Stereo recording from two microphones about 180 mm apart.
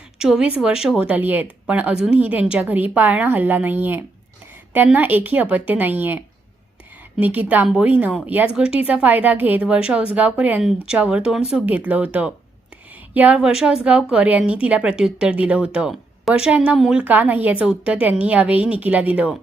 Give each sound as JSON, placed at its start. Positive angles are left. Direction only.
{"t": 0.2, "sound": "speech", "side_deg": -5}